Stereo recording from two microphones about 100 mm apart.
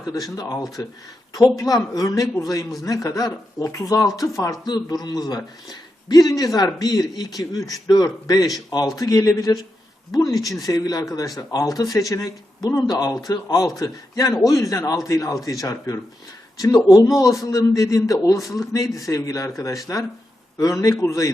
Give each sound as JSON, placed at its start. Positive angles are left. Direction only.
{"t": 0.0, "sound": "a man's voice", "side_deg": 35}